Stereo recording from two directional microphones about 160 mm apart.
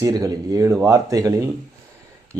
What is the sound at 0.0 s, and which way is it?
Speech, 25° right (ahead or behind).